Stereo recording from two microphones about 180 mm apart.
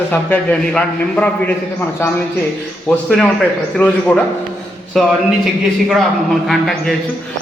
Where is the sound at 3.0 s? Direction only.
10° left (ahead or behind).